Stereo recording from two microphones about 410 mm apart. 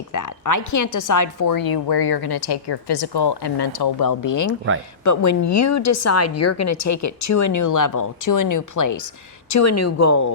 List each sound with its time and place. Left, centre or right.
0.1 s a woman's voice: left